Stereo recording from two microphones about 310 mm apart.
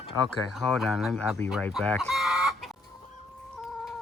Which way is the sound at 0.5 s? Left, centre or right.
Centre.